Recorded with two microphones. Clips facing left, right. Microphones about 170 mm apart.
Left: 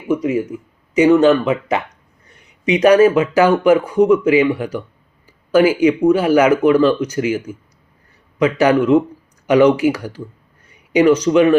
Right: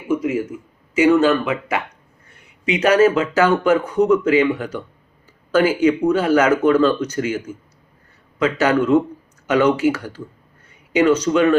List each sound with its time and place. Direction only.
0.9 s speech: 20° left (ahead or behind)
2.8 s speech: 15° left (ahead or behind)